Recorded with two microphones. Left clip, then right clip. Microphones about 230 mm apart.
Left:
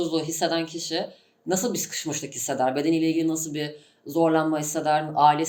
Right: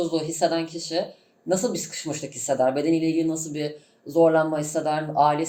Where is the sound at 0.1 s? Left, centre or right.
Left.